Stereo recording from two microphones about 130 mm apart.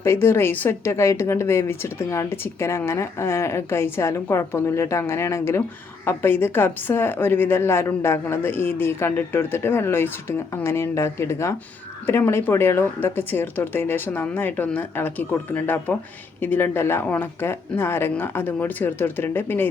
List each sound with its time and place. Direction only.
0.0 s a woman's voice: 20° left (ahead or behind)